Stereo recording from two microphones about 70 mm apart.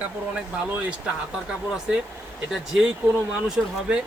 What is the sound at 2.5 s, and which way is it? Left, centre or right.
Speech, centre.